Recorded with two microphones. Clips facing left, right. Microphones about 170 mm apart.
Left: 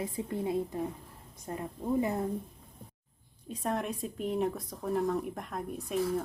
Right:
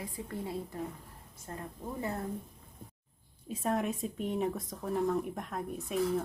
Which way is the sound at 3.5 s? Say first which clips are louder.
Right 1 dB; centre (ahead or behind).